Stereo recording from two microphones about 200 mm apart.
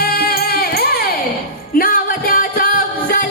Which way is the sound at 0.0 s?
50° left (ahead or behind).